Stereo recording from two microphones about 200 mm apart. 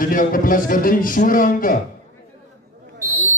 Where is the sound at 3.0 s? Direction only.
15° right (ahead or behind).